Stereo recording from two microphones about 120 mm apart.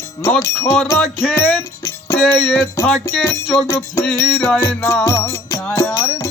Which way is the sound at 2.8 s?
5° left (ahead or behind).